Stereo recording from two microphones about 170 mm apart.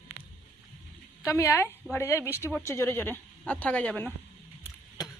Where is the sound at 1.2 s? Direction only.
15° left (ahead or behind).